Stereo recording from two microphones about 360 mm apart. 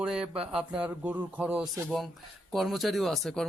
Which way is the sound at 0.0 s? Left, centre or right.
Centre.